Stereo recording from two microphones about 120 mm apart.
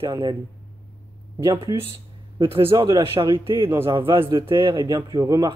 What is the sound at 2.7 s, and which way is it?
Speech, 40° right (ahead or behind).